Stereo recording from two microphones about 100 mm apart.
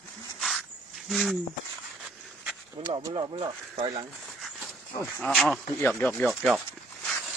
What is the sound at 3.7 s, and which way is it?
Speech, 75° right (ahead or behind).